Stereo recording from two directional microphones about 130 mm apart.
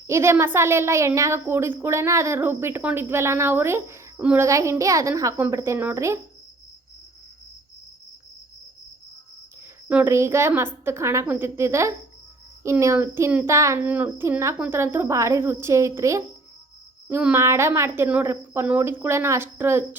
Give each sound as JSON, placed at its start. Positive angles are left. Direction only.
{"t": 0.1, "sound": "a woman's voice", "side_deg": -20}
{"t": 4.4, "sound": "a woman's voice", "side_deg": -25}
{"t": 9.9, "sound": "a woman's voice", "side_deg": -15}